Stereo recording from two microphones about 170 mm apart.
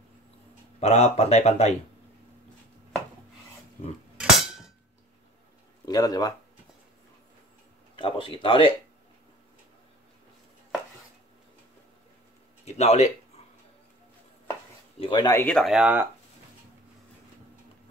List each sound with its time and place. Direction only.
0.7 s speech: 40° left (ahead or behind)
4.2 s a sound: 5° right (ahead or behind)
5.9 s speech: 25° left (ahead or behind)
7.9 s speech: 30° left (ahead or behind)
12.6 s speech: 40° left (ahead or behind)
15.0 s speech: 25° left (ahead or behind)
15.4 s speech: centre (ahead or behind)